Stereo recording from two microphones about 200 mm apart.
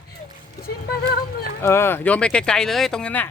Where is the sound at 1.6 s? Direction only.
10° left (ahead or behind).